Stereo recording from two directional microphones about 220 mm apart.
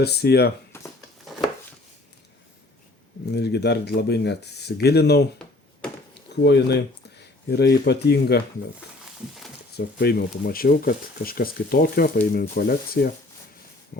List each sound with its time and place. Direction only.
0.0 s speech: 45° left (ahead or behind)
0.7 s a sound: 10° left (ahead or behind)
3.3 s speech: 50° left (ahead or behind)
6.4 s speech: 50° left (ahead or behind)
9.7 s speech: 45° left (ahead or behind)